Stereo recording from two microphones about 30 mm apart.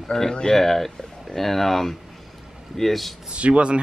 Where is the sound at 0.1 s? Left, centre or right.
Centre.